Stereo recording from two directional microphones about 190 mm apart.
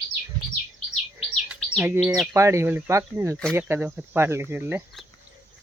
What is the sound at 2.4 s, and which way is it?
Speech, 15° right (ahead or behind).